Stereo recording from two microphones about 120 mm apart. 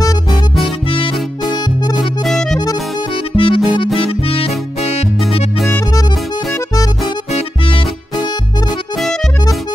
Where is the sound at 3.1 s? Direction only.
45° left (ahead or behind).